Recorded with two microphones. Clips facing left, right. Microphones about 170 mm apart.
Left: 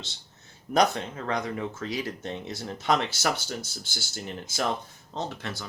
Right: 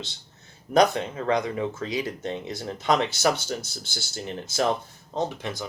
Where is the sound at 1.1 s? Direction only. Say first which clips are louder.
Right 5 dB; 20° right (ahead or behind).